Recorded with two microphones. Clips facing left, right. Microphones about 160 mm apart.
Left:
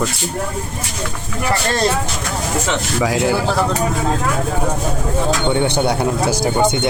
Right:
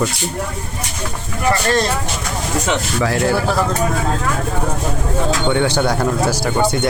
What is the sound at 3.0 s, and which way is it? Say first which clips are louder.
Speech: left 1 dB; 15° left (ahead or behind).